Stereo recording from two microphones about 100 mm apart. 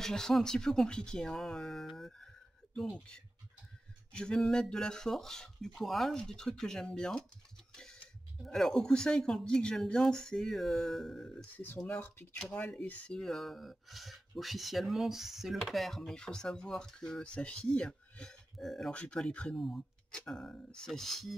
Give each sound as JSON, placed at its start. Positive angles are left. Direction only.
{"t": 0.0, "sound": "speech", "side_deg": 5}
{"t": 4.1, "sound": "speech", "side_deg": 10}
{"t": 11.5, "sound": "speech", "side_deg": 20}